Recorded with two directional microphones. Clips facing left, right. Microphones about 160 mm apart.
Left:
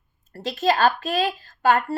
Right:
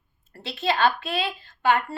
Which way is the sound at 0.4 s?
40° left (ahead or behind).